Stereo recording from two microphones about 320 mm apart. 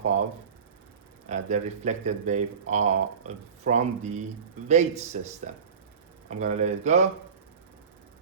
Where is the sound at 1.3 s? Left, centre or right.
Right.